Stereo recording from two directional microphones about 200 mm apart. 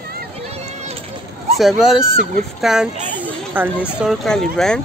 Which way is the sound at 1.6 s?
Centre (ahead or behind).